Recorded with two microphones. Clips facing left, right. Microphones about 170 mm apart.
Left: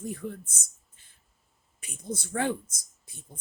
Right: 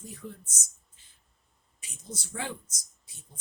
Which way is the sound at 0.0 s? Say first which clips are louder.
Left 8 dB; 55° left (ahead or behind).